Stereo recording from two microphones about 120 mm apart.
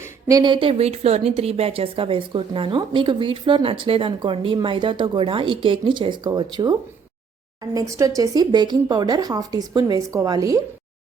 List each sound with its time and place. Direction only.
0.0 s speech: 30° right (ahead or behind)